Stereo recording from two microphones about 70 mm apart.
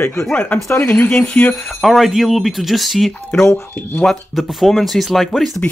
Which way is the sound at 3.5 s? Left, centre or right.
Left.